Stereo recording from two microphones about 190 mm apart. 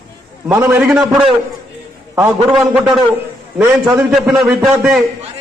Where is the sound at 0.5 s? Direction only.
15° right (ahead or behind).